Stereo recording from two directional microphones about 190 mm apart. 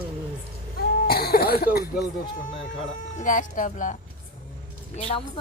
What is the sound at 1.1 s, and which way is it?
Speech, 55° left (ahead or behind).